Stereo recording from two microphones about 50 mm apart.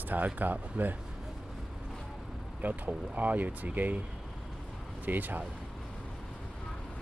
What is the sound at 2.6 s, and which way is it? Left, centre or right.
Speech, right.